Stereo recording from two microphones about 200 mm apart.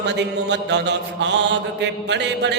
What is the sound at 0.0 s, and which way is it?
A man's voice, 60° right (ahead or behind).